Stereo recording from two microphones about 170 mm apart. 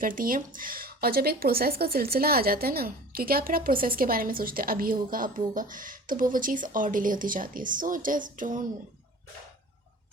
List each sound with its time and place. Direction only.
0.0 s speech: 55° right (ahead or behind)